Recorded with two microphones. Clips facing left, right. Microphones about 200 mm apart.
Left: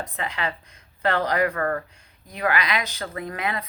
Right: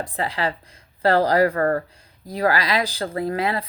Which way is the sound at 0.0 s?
30° right (ahead or behind).